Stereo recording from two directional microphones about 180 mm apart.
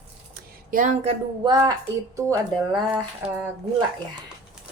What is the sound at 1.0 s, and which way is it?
Speech, 25° right (ahead or behind).